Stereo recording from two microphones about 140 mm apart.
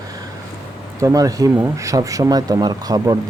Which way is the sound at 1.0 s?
25° right (ahead or behind).